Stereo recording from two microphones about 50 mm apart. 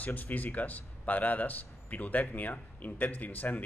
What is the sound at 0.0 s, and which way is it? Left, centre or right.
A man's voice, left.